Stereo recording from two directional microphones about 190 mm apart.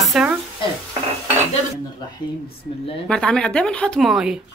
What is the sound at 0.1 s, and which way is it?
Sizzle, 5° right (ahead or behind).